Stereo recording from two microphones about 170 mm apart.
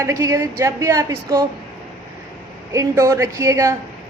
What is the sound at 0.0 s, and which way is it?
A woman's voice, 20° right (ahead or behind).